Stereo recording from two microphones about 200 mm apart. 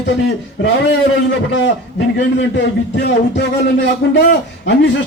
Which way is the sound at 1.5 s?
65° left (ahead or behind).